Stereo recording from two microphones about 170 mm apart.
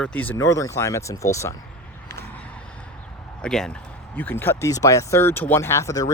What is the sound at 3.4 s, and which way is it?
Speech, 5° left (ahead or behind).